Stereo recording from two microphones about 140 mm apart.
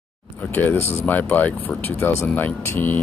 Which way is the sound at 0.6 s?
15° left (ahead or behind).